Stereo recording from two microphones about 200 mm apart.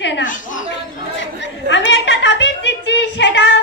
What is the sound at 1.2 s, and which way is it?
Chatter, 65° left (ahead or behind).